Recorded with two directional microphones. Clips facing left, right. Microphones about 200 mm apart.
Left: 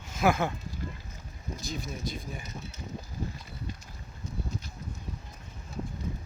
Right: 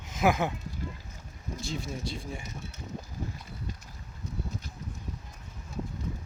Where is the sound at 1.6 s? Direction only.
25° right (ahead or behind).